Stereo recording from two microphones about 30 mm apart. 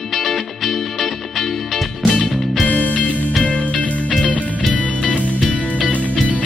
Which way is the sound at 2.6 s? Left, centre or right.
Left.